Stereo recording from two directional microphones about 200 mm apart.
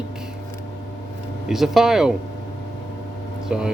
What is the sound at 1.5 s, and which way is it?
Speech, centre (ahead or behind).